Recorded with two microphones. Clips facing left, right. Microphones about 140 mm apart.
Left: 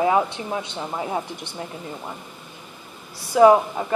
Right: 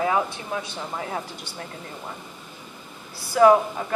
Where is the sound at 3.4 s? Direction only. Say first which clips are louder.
Left 2 dB; 20° left (ahead or behind).